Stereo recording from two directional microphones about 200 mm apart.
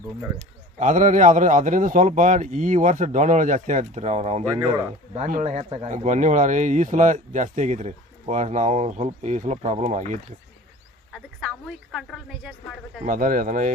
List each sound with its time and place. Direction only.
0.8 s speech: 40° right (ahead or behind)
11.9 s a woman's voice: centre (ahead or behind)
13.1 s speech: 45° right (ahead or behind)